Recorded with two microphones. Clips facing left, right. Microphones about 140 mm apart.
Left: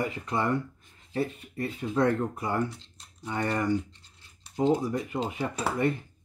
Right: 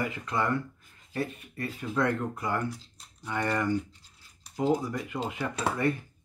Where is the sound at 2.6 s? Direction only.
Centre (ahead or behind).